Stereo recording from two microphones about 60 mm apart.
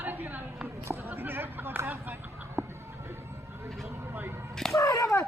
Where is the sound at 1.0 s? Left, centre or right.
Right.